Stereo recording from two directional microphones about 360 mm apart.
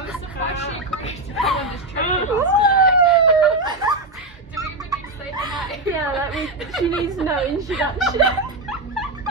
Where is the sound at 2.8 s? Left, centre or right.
Centre.